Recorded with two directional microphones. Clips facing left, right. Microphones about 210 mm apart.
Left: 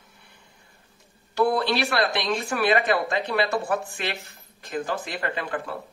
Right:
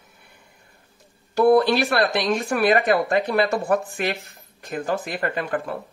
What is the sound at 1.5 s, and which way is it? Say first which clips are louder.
Speech: right 6 dB; 45° right (ahead or behind).